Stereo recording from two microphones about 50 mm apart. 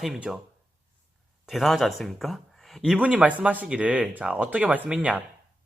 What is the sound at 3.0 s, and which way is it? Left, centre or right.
Speech, right.